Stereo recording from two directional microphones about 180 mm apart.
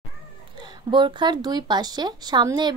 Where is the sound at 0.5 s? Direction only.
25° right (ahead or behind).